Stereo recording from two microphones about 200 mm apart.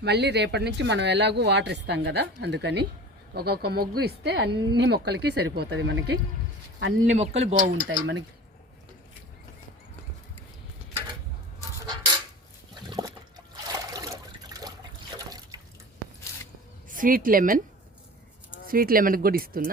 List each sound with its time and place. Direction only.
0.0 s speech: 55° right (ahead or behind)
12.9 s trickle: 20° right (ahead or behind)
16.9 s speech: 45° right (ahead or behind)
18.7 s speech: 45° right (ahead or behind)